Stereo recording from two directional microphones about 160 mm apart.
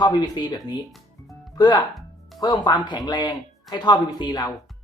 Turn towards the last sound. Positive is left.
turn(degrees=25)  # may be behind; listen again after turning